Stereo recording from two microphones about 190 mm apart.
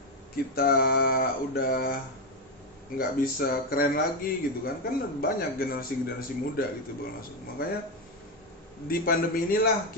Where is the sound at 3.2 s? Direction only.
50° left (ahead or behind).